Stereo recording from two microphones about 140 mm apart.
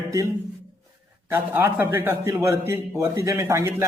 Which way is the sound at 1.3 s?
15° right (ahead or behind).